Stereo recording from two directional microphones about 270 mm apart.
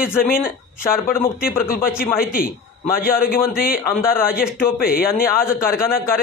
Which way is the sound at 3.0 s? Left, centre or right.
Left.